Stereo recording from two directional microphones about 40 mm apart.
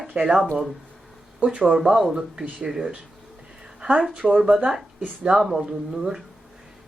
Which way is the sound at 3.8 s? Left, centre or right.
Right.